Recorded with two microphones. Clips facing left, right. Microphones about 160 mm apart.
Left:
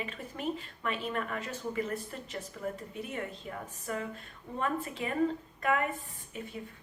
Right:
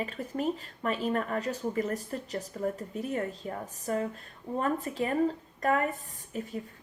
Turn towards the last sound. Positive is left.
turn(degrees=-40)  # may be behind; listen again after turning